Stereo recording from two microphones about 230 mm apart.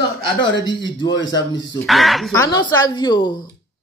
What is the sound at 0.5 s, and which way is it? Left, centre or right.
Speech, centre.